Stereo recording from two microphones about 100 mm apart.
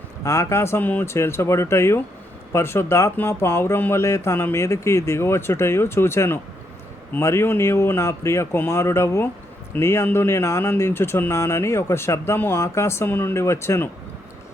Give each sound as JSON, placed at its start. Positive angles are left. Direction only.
{"t": 0.3, "sound": "speech", "side_deg": 30}